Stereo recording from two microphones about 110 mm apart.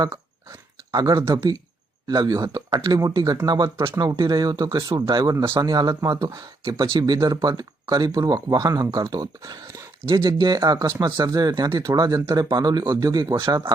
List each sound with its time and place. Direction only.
0.9 s speech: 35° right (ahead or behind)